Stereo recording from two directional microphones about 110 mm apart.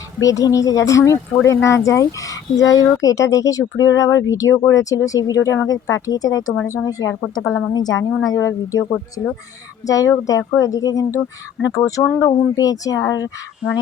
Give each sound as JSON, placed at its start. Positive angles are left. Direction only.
{"t": 0.2, "sound": "a woman's voice", "side_deg": 30}